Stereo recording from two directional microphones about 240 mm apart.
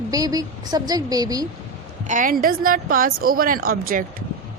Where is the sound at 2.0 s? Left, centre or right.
Right.